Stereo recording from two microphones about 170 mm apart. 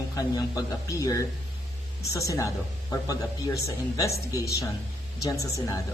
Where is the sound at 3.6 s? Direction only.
20° left (ahead or behind).